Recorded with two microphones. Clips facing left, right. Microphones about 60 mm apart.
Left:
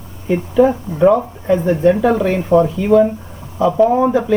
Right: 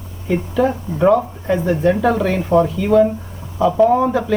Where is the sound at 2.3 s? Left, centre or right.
Centre.